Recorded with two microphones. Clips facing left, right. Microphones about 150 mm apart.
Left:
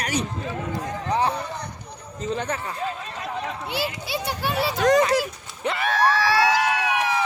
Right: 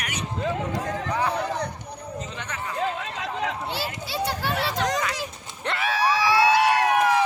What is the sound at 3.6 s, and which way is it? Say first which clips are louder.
Speech: left 3 dB; 15° left (ahead or behind).